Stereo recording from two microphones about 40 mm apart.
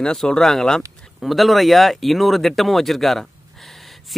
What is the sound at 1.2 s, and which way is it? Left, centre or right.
Speech, centre.